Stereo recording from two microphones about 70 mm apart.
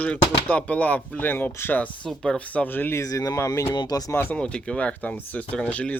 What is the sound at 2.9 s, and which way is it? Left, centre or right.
Speech, left.